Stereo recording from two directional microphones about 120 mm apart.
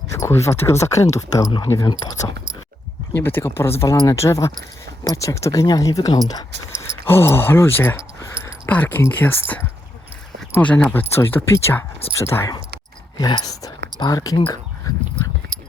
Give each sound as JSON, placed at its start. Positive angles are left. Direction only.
{"t": 0.1, "sound": "speech", "side_deg": 25}
{"t": 3.1, "sound": "speech", "side_deg": 20}
{"t": 6.9, "sound": "a sound", "side_deg": 20}
{"t": 8.7, "sound": "speech", "side_deg": 15}
{"t": 13.1, "sound": "speech", "side_deg": 35}